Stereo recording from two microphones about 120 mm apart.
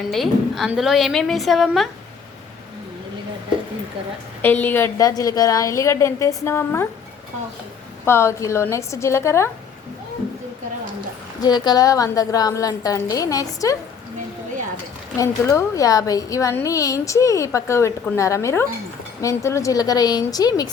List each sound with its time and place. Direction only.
0.1 s a woman's voice: centre (ahead or behind)
4.4 s a woman's voice: 15° left (ahead or behind)
4.9 s a woman's voice: 30° left (ahead or behind)
8.0 s a woman's voice: 20° left (ahead or behind)
11.3 s a woman's voice: 35° left (ahead or behind)
15.2 s a woman's voice: 25° left (ahead or behind)